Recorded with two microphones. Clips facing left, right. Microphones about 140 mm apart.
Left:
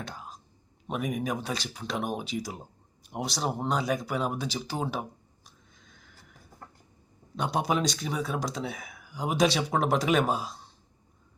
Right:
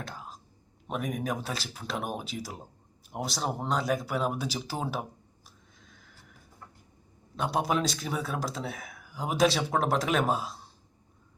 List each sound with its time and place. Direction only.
0.0 s a sound: centre (ahead or behind)
0.9 s speech: centre (ahead or behind)
5.8 s neigh: centre (ahead or behind)
7.3 s speech: centre (ahead or behind)